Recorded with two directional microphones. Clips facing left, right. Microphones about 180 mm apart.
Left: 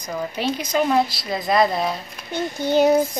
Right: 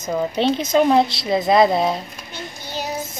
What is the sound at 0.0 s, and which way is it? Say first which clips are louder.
Speech: right 5 dB; 25° right (ahead or behind).